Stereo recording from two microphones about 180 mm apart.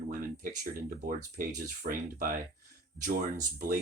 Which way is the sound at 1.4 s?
50° right (ahead or behind).